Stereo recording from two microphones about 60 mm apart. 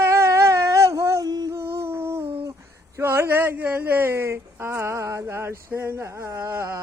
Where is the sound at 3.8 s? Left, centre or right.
Right.